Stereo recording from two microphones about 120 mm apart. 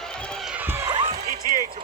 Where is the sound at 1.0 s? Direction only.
65° right (ahead or behind).